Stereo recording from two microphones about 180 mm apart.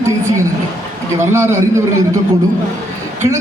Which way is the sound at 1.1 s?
15° right (ahead or behind).